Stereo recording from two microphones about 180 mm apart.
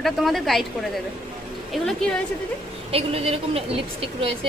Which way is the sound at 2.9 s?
35° right (ahead or behind).